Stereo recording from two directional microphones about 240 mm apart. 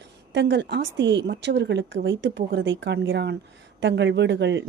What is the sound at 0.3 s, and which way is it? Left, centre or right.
Speech, right.